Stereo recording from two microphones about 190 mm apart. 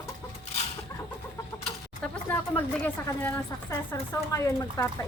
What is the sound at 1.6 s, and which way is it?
Speech, 5° left (ahead or behind).